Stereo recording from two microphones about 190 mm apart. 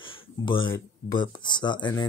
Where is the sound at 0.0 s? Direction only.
25° left (ahead or behind).